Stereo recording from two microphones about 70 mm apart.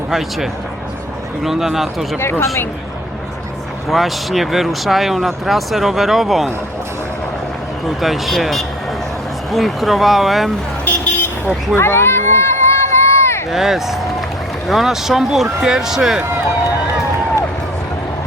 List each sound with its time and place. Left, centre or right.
0.1 s speech: centre
2.1 s speech: left
3.8 s speech: centre
7.9 s speech: centre
10.8 s vehicle: left
11.7 s a sound: left
13.5 s speech: centre